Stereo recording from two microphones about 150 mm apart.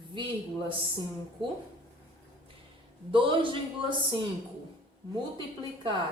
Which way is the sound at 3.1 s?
35° right (ahead or behind).